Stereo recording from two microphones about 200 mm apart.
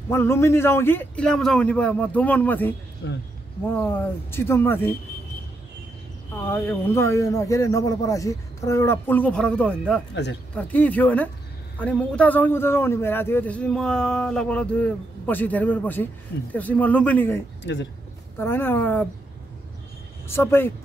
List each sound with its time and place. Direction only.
0.1 s a man's voice: 10° left (ahead or behind)
3.0 s speech: 60° left (ahead or behind)
3.6 s a man's voice: 10° left (ahead or behind)
6.3 s a man's voice: 10° left (ahead or behind)
18.4 s a man's voice: 10° left (ahead or behind)
20.2 s a man's voice: 10° left (ahead or behind)